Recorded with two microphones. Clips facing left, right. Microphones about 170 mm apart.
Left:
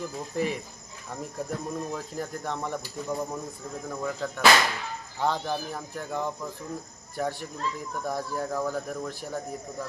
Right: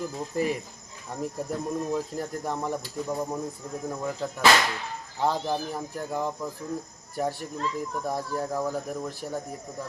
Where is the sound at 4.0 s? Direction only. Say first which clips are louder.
Even; 15° right (ahead or behind).